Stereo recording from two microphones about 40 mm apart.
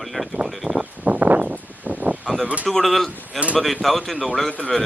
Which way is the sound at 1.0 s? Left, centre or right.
Right.